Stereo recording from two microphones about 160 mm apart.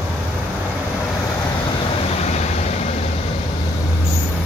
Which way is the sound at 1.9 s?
40° left (ahead or behind).